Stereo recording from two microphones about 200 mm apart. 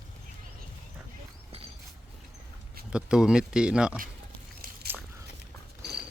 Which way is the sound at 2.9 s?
5° right (ahead or behind).